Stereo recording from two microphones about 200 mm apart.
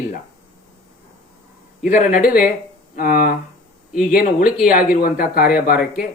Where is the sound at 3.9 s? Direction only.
45° left (ahead or behind).